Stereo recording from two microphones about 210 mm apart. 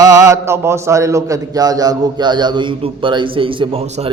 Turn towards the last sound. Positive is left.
turn(degrees=-25)  # may be behind; listen again after turning